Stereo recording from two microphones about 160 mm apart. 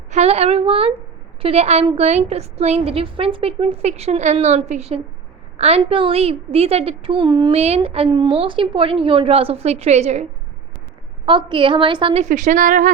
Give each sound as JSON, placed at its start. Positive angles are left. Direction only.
{"t": 0.1, "sound": "a woman's voice", "side_deg": -40}
{"t": 7.5, "sound": "a woman's voice", "side_deg": -40}
{"t": 11.3, "sound": "a woman's voice", "side_deg": -30}
{"t": 12.2, "sound": "a woman's voice", "side_deg": -50}